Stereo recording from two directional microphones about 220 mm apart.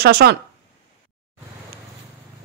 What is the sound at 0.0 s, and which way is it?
Speech, 45° right (ahead or behind).